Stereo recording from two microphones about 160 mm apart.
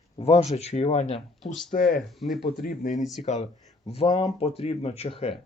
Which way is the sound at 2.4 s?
65° left (ahead or behind).